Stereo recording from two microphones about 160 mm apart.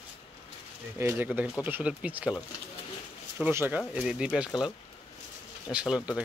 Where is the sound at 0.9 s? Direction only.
15° right (ahead or behind).